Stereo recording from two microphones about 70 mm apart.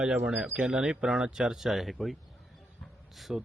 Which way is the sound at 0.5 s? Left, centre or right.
Centre.